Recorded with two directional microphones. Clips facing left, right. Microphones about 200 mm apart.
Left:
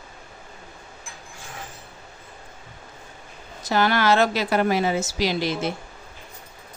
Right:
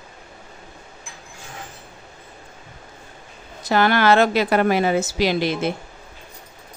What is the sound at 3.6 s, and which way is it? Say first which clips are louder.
A woman's voice: right 3 dB; 60° right (ahead or behind).